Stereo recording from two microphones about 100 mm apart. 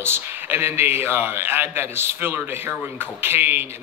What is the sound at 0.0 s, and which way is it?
A man's voice, 20° right (ahead or behind).